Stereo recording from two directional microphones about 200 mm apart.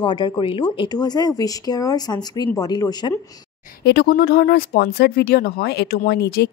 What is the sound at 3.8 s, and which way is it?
Speech, 50° left (ahead or behind).